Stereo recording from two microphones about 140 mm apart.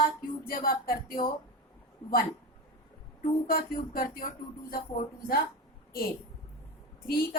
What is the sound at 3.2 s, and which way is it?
Speech, 90° left.